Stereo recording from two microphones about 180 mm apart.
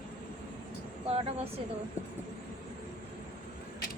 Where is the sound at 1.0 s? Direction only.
35° right (ahead or behind).